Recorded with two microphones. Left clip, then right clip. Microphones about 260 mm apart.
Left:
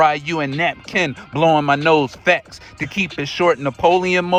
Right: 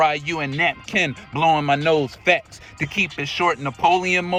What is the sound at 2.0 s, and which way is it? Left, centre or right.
A man's voice, left.